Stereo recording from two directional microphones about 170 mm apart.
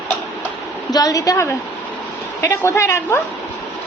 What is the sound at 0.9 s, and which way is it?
Speech, 20° left (ahead or behind).